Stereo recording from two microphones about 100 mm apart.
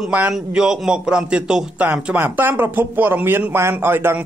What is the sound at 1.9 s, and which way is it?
Speech, 20° right (ahead or behind).